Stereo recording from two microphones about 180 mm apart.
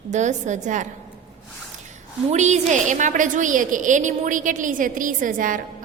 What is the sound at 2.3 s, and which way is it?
A woman's voice, 40° right (ahead or behind).